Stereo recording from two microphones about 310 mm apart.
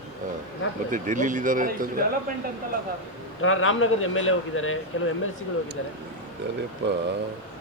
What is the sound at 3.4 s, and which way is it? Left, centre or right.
Speech, left.